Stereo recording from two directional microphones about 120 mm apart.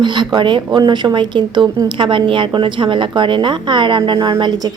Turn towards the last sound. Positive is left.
turn(degrees=-40)  # may be behind; listen again after turning